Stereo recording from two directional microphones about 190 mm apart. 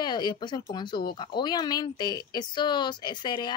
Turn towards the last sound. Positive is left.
turn(degrees=25)  # may be behind; listen again after turning